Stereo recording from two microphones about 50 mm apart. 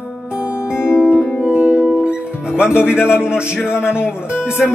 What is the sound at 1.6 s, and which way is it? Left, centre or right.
Music, right.